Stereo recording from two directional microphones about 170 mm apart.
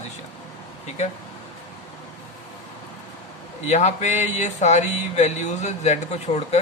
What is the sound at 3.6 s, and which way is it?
Speech, 40° left (ahead or behind).